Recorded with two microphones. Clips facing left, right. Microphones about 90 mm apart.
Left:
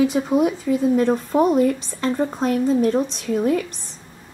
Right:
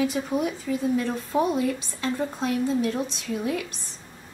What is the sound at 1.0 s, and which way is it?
A woman's voice, 45° left (ahead or behind).